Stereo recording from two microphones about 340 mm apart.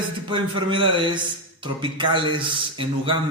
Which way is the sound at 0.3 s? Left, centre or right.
Centre.